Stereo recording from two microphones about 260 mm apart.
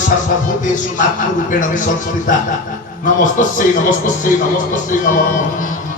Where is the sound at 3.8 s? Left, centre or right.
Left.